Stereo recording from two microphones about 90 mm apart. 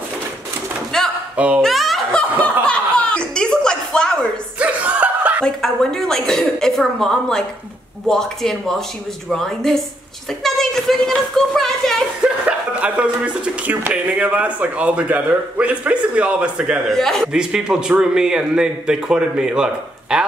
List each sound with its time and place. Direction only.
0.9 s a sound: 5° left (ahead or behind)
1.3 s speech: 15° right (ahead or behind)
1.6 s speech: centre (ahead or behind)
2.4 s chuckle: 10° left (ahead or behind)
4.6 s chuckle: 15° right (ahead or behind)
5.4 s a woman's voice: 5° left (ahead or behind)
12.2 s speech: 15° right (ahead or behind)
16.8 s a woman's voice: 5° left (ahead or behind)
17.3 s speech: 10° right (ahead or behind)